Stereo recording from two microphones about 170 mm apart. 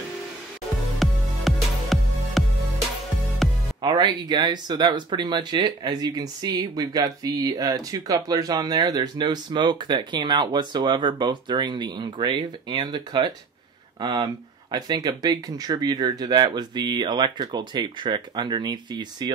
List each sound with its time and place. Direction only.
0.9 s music: centre (ahead or behind)
3.8 s speech: 25° right (ahead or behind)